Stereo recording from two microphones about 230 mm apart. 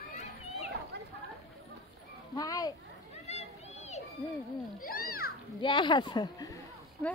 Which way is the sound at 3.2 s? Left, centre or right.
Left.